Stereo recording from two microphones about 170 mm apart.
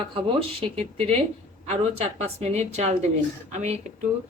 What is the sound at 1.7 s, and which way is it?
A woman's voice, 40° right (ahead or behind).